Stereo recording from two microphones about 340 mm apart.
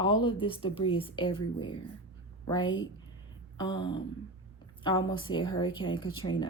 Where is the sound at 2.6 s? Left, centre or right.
Left.